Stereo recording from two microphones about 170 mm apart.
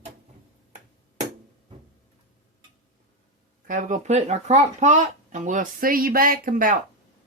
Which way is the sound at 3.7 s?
50° right (ahead or behind).